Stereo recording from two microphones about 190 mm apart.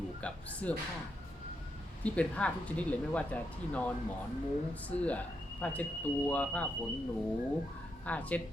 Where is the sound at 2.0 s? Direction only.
5° left (ahead or behind).